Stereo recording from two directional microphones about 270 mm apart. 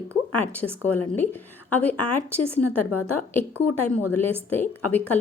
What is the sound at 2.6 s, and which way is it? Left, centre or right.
Speech, left.